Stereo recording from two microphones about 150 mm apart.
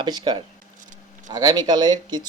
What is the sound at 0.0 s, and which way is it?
Speech, 30° right (ahead or behind).